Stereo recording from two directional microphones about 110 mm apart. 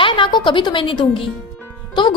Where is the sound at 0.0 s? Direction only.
50° left (ahead or behind).